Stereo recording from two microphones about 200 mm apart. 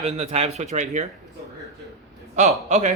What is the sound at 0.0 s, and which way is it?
Speech, 30° right (ahead or behind).